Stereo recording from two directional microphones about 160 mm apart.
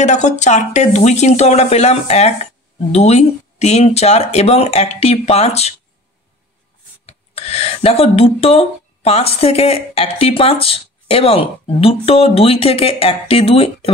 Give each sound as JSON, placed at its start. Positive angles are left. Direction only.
{"t": 0.0, "sound": "speech", "side_deg": 45}
{"t": 7.1, "sound": "speech", "side_deg": 40}